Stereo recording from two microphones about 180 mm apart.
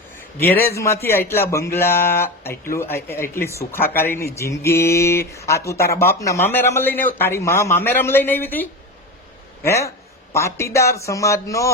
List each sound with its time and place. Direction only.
0.4 s speech: 10° left (ahead or behind)
9.6 s speech: 15° left (ahead or behind)